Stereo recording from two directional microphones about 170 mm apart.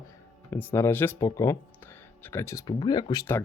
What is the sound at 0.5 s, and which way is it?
Speech, 15° left (ahead or behind).